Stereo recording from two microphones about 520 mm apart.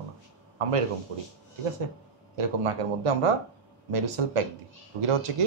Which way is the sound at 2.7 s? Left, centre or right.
Right.